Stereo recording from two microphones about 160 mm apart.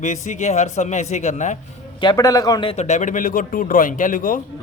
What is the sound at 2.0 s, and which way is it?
Speech, 25° left (ahead or behind).